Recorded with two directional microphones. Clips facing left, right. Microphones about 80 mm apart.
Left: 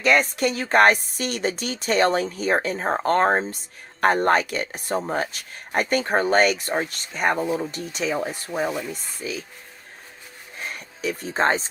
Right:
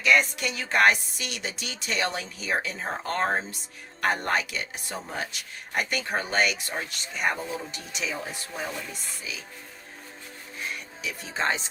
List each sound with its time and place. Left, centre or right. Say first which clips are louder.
0.0 s speech: left 4 dB; left
10.7 s speech: left 8 dB; left